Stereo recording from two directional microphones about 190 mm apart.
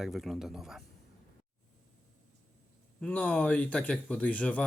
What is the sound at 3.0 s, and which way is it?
Speech, 5° left (ahead or behind).